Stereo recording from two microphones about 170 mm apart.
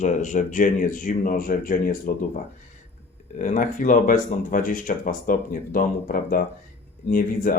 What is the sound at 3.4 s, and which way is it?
Speech, 50° left (ahead or behind).